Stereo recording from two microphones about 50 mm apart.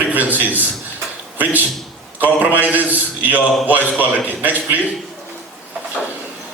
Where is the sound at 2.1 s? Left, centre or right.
Right.